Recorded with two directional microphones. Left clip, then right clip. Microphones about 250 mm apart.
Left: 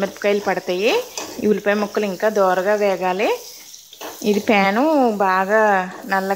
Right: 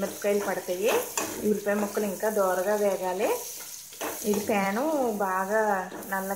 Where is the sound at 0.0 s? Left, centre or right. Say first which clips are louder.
Left 8 dB; left.